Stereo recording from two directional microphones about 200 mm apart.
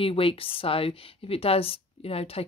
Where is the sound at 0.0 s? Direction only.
25° left (ahead or behind).